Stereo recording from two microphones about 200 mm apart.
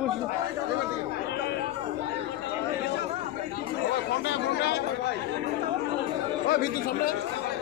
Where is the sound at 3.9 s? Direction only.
55° left (ahead or behind).